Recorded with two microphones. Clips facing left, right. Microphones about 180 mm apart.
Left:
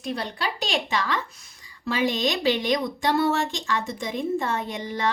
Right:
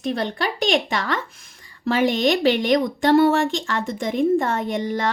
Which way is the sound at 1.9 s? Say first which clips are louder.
Right 6 dB; 55° right (ahead or behind).